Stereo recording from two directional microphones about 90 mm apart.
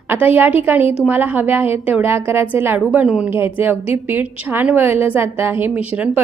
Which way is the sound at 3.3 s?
25° right (ahead or behind).